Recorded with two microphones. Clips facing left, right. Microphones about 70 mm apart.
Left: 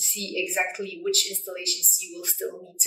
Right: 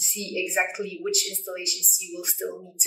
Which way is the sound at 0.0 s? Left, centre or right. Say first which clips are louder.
Even; centre.